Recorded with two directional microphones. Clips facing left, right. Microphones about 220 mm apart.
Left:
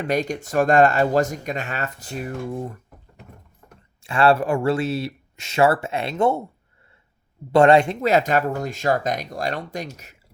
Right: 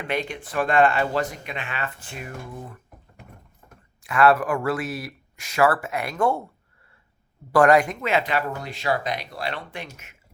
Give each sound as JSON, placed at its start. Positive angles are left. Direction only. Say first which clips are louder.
{"t": 0.0, "sound": "speech", "louder": "left 5 dB", "side_deg": 40}
{"t": 4.0, "sound": "speech", "louder": "left 1 dB", "side_deg": 30}
{"t": 7.5, "sound": "speech", "louder": "left 3 dB", "side_deg": 25}